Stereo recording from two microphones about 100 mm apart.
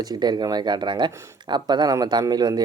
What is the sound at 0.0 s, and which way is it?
Speech, 45° right (ahead or behind).